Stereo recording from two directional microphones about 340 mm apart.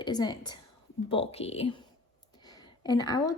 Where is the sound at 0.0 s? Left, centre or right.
Centre.